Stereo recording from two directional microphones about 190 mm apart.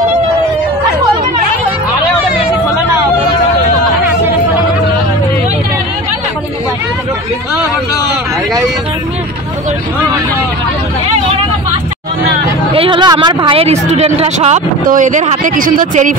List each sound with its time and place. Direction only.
12.7 s speech: 25° right (ahead or behind)
14.9 s speech: 40° right (ahead or behind)